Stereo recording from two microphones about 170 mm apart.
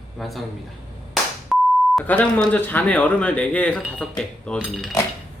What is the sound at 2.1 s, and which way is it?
Speech, 10° left (ahead or behind).